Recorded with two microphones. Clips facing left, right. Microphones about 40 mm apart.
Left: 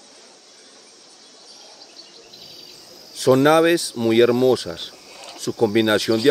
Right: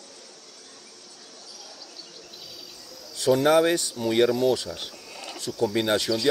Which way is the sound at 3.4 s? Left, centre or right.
Left.